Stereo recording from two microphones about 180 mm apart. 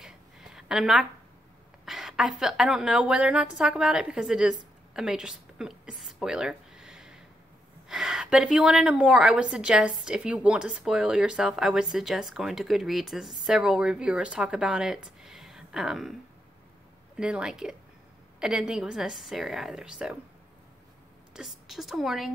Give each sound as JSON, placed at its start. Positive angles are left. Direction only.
{"t": 0.0, "sound": "a sound", "side_deg": -5}
{"t": 1.9, "sound": "a woman's voice", "side_deg": 0}
{"t": 4.9, "sound": "a sound", "side_deg": -5}
{"t": 7.9, "sound": "a woman's voice", "side_deg": -5}
{"t": 17.2, "sound": "a woman's voice", "side_deg": -5}
{"t": 21.3, "sound": "a woman's voice", "side_deg": 0}